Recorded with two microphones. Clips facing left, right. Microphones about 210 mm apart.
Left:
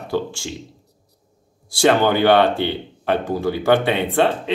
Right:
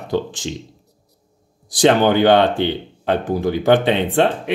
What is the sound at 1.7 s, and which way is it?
Speech, 15° right (ahead or behind).